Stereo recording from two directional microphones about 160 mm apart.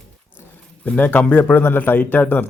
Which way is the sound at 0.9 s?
10° left (ahead or behind).